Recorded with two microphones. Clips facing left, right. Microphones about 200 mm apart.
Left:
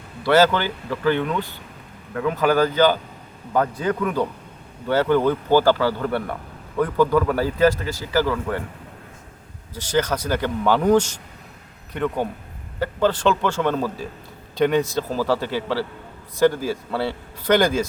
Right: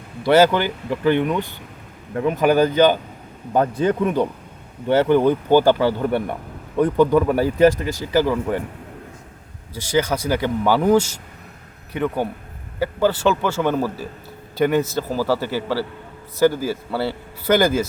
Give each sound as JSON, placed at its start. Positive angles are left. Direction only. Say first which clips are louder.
{"t": 0.2, "sound": "a man's voice", "louder": "right 2 dB", "side_deg": -15}
{"t": 9.7, "sound": "speech", "louder": "right 2 dB", "side_deg": -10}